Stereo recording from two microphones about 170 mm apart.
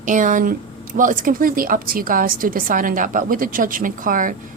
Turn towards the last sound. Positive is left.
turn(degrees=-50)  # may be behind; listen again after turning